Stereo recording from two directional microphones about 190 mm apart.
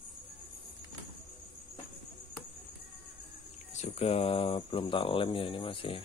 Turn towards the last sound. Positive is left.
turn(degrees=30)  # may be behind; listen again after turning